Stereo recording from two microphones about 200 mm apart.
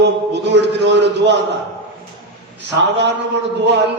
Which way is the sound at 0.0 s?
60° right (ahead or behind).